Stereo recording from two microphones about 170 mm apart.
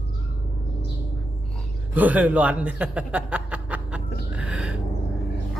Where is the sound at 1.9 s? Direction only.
10° right (ahead or behind).